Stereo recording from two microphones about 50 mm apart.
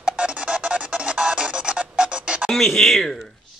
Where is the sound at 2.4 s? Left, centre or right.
Centre.